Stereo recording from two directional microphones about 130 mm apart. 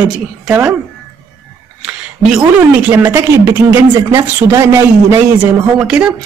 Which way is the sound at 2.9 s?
20° right (ahead or behind).